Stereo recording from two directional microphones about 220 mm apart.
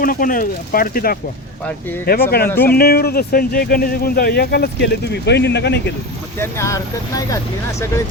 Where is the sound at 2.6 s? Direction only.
45° left (ahead or behind).